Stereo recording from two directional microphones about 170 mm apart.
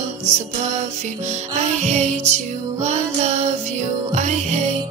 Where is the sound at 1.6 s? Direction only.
40° right (ahead or behind).